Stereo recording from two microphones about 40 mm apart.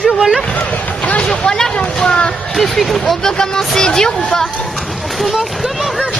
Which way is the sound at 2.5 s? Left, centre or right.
Centre.